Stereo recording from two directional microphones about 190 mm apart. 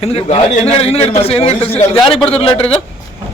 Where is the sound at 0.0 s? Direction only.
30° left (ahead or behind).